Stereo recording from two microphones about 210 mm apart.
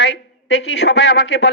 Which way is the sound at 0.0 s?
55° left (ahead or behind).